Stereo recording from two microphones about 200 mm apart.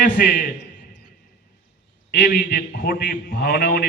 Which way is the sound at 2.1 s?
55° left (ahead or behind).